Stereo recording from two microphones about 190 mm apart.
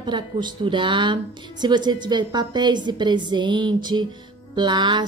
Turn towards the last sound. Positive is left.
turn(degrees=-25)  # may be behind; listen again after turning